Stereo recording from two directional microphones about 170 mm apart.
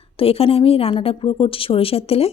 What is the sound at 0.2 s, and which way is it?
A woman's voice, 35° left (ahead or behind).